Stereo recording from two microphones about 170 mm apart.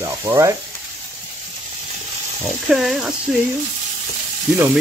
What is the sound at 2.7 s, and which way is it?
Speech, centre (ahead or behind).